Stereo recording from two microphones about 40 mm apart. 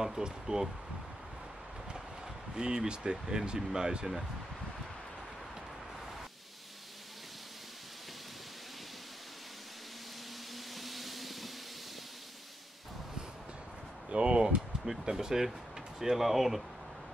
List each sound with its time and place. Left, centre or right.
0.0 s speech: centre
2.5 s speech: centre
10.8 s a sound: centre
14.1 s speech: right; by 16.6 s centre